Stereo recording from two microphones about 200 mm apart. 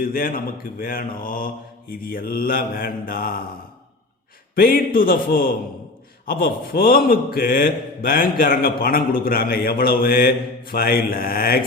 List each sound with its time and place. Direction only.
0.0 s mantra: 45° left (ahead or behind)
4.5 s mantra: 50° left (ahead or behind)